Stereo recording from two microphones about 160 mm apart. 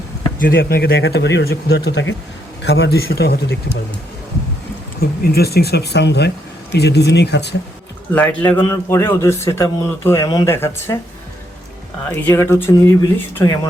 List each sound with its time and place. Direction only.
0.3 s speech: 65° left (ahead or behind); by 3.4 s 80° left
4.9 s speech: 75° left (ahead or behind)
8.1 s speech: 10° left (ahead or behind)
12.2 s speech: 15° left (ahead or behind)